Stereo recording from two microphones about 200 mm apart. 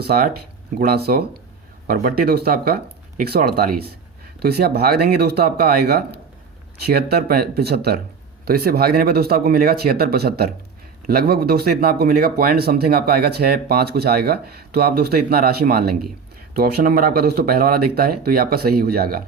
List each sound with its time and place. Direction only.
0.0 s speech: 50° right (ahead or behind)